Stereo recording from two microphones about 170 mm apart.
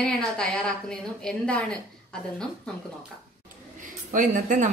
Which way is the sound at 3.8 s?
50° right (ahead or behind).